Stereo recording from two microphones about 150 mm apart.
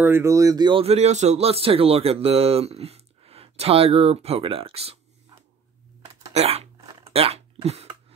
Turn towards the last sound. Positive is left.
turn(degrees=-45)  # may be behind; listen again after turning